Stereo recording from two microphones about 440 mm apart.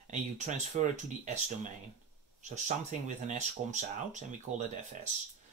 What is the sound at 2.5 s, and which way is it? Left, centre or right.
Speech, centre.